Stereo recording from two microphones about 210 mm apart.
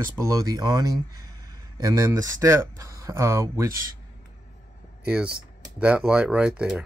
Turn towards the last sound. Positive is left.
turn(degrees=-5)  # may be behind; listen again after turning